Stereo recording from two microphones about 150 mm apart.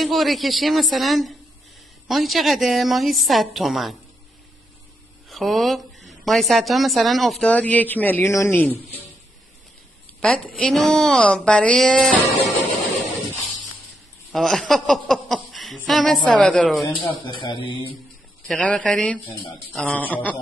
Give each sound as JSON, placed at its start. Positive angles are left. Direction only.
{"t": 0.0, "sound": "a woman's voice", "side_deg": 0}
{"t": 5.3, "sound": "a woman's voice", "side_deg": 0}
{"t": 10.2, "sound": "a woman's voice", "side_deg": 5}
{"t": 14.3, "sound": "a woman's voice", "side_deg": 0}
{"t": 17.1, "sound": "speech", "side_deg": 35}
{"t": 18.5, "sound": "speech", "side_deg": 10}